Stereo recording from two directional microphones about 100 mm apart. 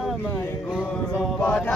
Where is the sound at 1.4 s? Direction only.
10° left (ahead or behind).